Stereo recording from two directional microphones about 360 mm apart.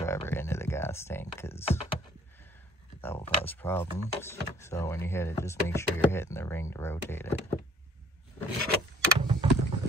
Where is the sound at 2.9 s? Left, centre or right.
Centre.